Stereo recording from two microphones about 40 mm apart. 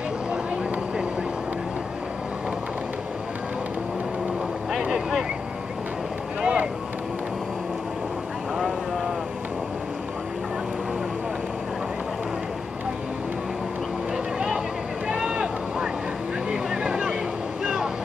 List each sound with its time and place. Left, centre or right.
6.4 s boat: right
15.0 s a sound: right
16.7 s vehicle: right